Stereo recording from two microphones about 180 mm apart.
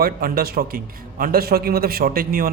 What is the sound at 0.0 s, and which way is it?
Speech, 55° right (ahead or behind).